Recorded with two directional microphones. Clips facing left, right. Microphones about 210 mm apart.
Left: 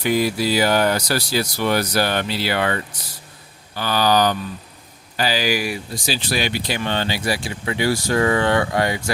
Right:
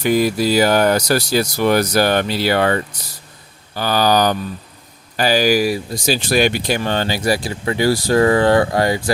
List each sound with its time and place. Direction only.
0.0 s speech: 45° right (ahead or behind)